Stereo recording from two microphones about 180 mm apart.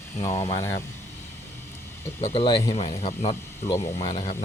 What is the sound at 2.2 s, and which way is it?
Speech, 35° left (ahead or behind).